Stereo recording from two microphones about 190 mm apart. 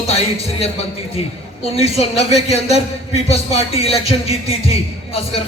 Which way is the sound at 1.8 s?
35° left (ahead or behind).